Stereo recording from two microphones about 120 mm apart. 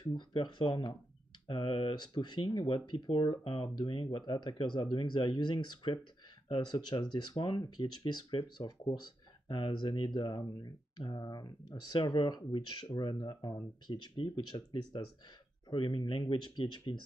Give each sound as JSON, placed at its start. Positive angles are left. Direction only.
{"t": 0.0, "sound": "speech", "side_deg": 40}